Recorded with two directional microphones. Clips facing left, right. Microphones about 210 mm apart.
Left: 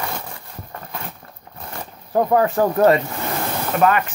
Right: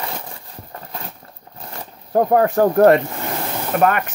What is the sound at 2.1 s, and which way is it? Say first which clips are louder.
Speech: right 2 dB; 50° right (ahead or behind).